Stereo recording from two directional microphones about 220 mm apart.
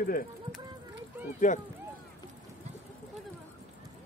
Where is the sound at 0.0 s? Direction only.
40° left (ahead or behind).